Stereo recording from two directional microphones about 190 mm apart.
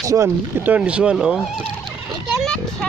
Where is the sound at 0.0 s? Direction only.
15° right (ahead or behind).